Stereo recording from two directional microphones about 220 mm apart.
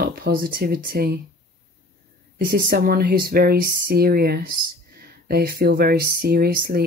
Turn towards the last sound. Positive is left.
turn(degrees=-45)  # may be behind; listen again after turning